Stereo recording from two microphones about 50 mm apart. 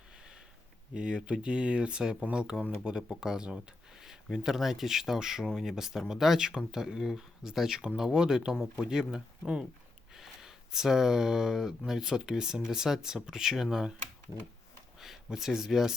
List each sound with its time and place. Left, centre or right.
0.9 s speech: centre
15.0 s speech: centre